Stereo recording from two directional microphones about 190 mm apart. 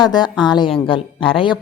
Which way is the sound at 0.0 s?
20° left (ahead or behind).